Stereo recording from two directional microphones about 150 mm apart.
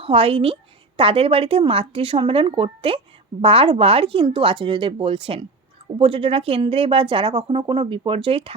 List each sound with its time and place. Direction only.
0.0 s a woman's voice: 35° right (ahead or behind)